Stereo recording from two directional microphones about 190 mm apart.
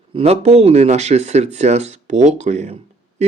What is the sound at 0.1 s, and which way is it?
A man's voice, 30° right (ahead or behind).